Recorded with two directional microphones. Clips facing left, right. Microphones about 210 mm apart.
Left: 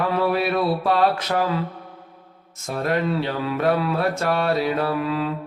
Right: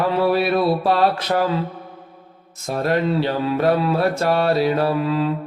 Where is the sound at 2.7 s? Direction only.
35° right (ahead or behind).